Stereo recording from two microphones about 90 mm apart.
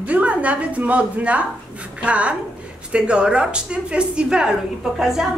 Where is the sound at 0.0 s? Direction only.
15° right (ahead or behind).